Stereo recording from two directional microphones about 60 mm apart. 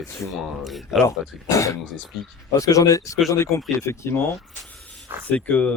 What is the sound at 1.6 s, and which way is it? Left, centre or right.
Speech, left.